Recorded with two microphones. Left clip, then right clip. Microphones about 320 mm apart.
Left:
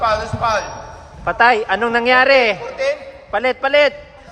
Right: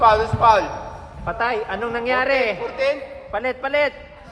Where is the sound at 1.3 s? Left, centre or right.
Left.